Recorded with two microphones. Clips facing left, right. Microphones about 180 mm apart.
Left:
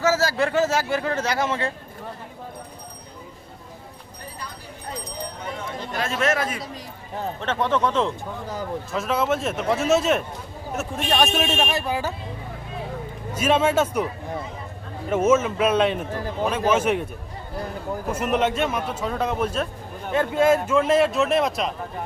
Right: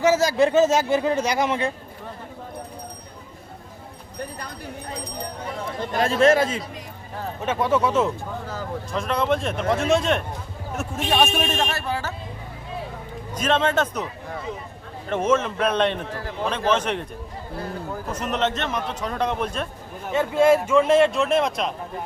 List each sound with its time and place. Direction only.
0.0 s speech: 15° right (ahead or behind)
5.6 s a man's voice: 35° right (ahead or behind)
7.4 s speech: 10° right (ahead or behind)
8.9 s speech: 5° left (ahead or behind)
13.3 s a man's voice: 10° left (ahead or behind)
15.1 s a man's voice: 5° left (ahead or behind)
18.1 s a man's voice: 10° left (ahead or behind)